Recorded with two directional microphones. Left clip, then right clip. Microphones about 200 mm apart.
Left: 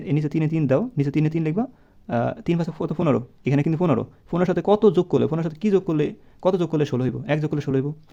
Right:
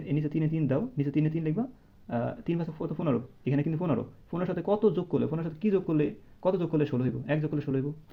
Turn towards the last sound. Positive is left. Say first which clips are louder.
# left 7 dB
turn(degrees=45)  # may be behind; listen again after turning